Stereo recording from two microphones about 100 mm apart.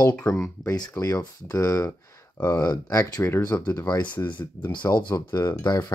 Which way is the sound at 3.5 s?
20° left (ahead or behind).